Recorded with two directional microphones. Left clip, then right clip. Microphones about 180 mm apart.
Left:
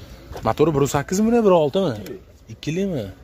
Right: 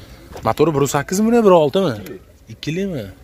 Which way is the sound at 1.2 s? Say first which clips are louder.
Right 4 dB; 20° right (ahead or behind).